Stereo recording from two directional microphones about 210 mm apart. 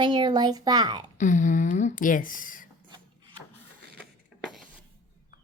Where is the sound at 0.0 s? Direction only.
20° right (ahead or behind).